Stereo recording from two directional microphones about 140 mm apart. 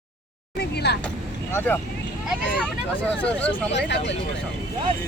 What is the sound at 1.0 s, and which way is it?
Vehicle, 15° left (ahead or behind).